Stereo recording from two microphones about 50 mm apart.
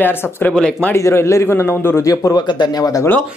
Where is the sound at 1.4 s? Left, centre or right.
Left.